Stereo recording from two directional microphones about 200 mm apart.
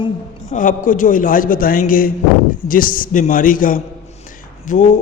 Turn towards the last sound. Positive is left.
turn(degrees=40)  # may be behind; listen again after turning